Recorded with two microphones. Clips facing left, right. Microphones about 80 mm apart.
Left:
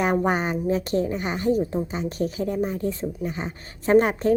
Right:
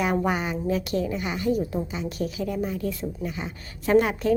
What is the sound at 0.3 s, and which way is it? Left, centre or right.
A woman's voice, left.